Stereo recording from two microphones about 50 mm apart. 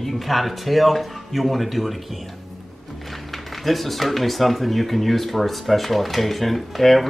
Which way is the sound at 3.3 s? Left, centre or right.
Centre.